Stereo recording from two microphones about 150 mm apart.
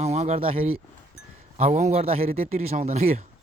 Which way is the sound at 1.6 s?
50° right (ahead or behind).